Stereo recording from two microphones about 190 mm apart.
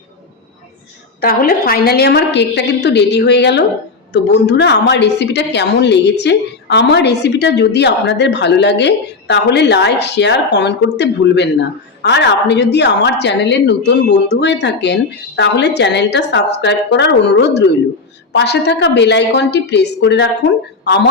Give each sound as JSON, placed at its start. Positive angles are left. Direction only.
{"t": 1.2, "sound": "a woman's voice", "side_deg": 50}